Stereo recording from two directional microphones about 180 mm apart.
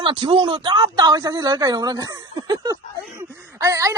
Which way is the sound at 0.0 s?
25° right (ahead or behind).